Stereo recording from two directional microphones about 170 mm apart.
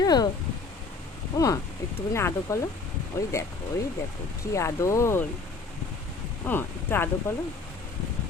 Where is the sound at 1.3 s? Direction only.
15° left (ahead or behind).